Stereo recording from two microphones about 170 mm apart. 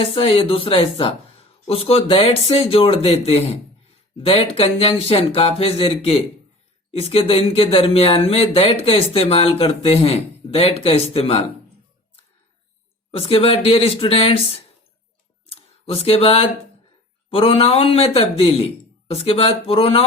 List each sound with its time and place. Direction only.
0.0 s speech: 35° left (ahead or behind)
13.1 s speech: 35° left (ahead or behind)
15.4 s a sound: 35° left (ahead or behind)
17.2 s speech: 30° left (ahead or behind)